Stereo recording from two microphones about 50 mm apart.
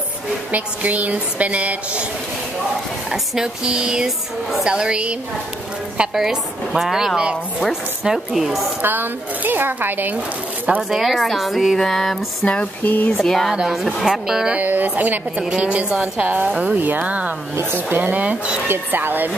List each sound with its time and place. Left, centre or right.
0.5 s a woman's voice: right
3.1 s a woman's voice: centre
6.1 s speech: centre
8.8 s speech: right
10.8 s a woman's voice: centre
12.8 s speech: left
13.1 s a woman's voice: centre
13.6 s speech: centre
14.5 s a woman's voice: right
18.7 s speech: right